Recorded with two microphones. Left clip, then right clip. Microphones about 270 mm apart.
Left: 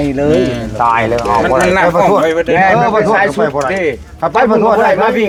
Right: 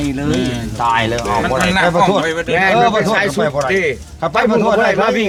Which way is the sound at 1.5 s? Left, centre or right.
Right.